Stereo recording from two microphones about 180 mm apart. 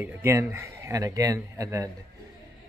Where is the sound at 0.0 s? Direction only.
15° right (ahead or behind).